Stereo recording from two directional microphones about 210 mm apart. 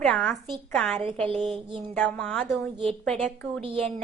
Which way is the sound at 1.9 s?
5° left (ahead or behind).